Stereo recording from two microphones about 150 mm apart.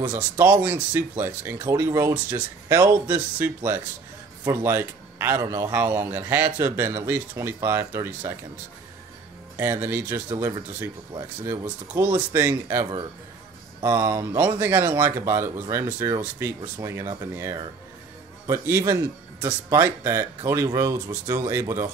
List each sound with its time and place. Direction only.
0.0 s a man's voice: 15° right (ahead or behind)
9.6 s a man's voice: 15° right (ahead or behind)
11.9 s speech: 20° right (ahead or behind)
13.8 s speech: 20° right (ahead or behind)
18.5 s a man's voice: 20° right (ahead or behind)